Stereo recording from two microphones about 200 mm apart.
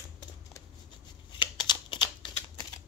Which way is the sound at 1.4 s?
20° left (ahead or behind).